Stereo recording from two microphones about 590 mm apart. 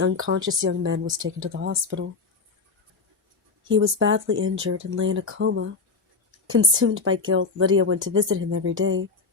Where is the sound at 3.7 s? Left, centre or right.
Centre.